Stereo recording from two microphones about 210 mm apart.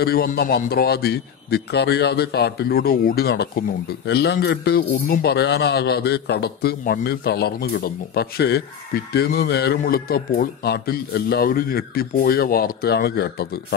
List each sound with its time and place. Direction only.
0.0 s a man's voice: 45° left (ahead or behind)